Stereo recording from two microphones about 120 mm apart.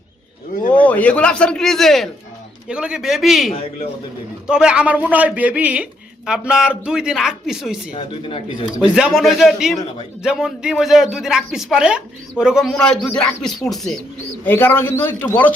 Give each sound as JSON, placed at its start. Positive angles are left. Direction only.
{"t": 0.7, "sound": "a man's voice", "side_deg": 10}
{"t": 2.6, "sound": "a man's voice", "side_deg": -10}
{"t": 7.9, "sound": "speech", "side_deg": 50}
{"t": 9.0, "sound": "speech", "side_deg": -5}
{"t": 12.7, "sound": "speech", "side_deg": 5}
{"t": 14.4, "sound": "speech", "side_deg": 20}